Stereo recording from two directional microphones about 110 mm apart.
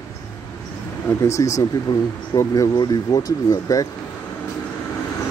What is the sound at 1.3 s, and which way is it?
Speech, 30° left (ahead or behind).